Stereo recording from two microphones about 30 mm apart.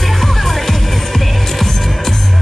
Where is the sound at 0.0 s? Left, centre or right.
Centre.